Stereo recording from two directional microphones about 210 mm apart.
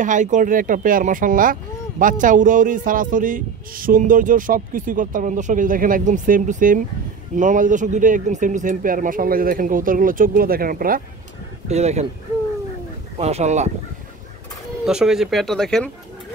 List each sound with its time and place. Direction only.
0.0 s speech: 35° right (ahead or behind)
11.7 s speech: 30° right (ahead or behind)
13.2 s speech: 30° right (ahead or behind)
14.9 s speech: 5° right (ahead or behind)